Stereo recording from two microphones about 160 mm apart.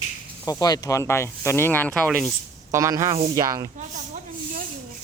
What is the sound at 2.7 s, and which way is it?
Speech, 20° right (ahead or behind).